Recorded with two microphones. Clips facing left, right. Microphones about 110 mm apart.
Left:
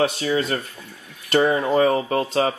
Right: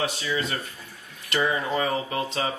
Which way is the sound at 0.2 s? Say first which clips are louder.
Left 6 dB; 40° left (ahead or behind).